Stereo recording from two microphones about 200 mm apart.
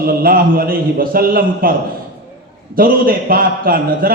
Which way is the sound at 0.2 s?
45° right (ahead or behind).